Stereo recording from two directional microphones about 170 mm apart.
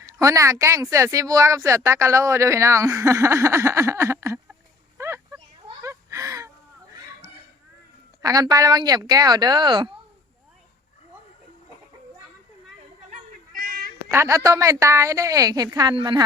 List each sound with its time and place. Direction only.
0.0 s speech: 15° right (ahead or behind)
4.9 s a sound: 15° right (ahead or behind)
8.2 s speech: 20° right (ahead or behind)
13.1 s cat: 55° right (ahead or behind)
14.1 s speech: 15° right (ahead or behind)